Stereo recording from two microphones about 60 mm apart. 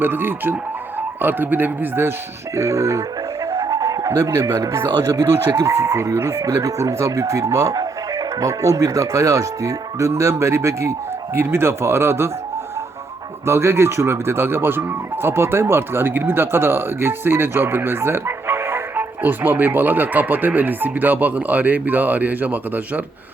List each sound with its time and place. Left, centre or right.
0.0 s speech: right
2.6 s speech: right
3.4 s music: right
4.4 s speech: right
6.4 s speech: right
11.3 s speech: right
13.4 s speech: right